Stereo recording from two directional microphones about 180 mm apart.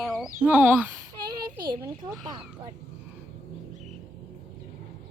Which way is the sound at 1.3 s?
25° right (ahead or behind).